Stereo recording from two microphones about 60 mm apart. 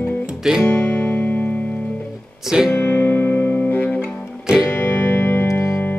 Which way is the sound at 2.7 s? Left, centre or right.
Left.